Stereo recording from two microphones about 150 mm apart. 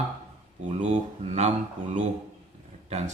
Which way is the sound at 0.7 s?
50° right (ahead or behind).